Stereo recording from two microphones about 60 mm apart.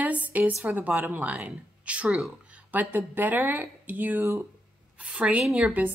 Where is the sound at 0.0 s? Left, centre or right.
Right.